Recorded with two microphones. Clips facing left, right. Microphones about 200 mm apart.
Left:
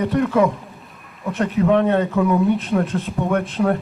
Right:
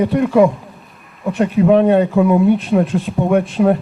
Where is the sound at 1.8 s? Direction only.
15° right (ahead or behind).